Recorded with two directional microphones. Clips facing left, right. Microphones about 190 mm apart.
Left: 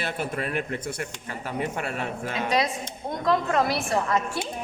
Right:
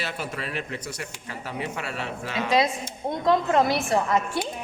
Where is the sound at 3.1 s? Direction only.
25° right (ahead or behind).